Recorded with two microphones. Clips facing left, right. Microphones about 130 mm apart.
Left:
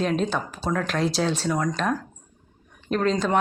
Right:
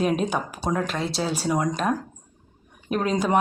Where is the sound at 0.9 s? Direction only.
Centre (ahead or behind).